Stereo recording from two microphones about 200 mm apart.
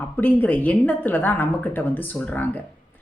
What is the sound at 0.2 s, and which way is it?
Speech, 10° left (ahead or behind).